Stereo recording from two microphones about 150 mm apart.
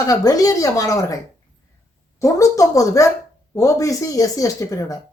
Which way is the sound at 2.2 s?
20° left (ahead or behind).